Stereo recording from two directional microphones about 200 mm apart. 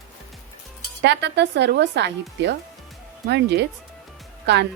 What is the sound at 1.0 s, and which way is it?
Speech, 60° right (ahead or behind).